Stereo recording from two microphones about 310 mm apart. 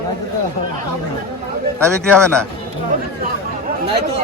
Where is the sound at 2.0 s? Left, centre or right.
Centre.